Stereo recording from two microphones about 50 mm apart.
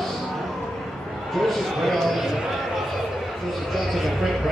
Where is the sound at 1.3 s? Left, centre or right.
Centre.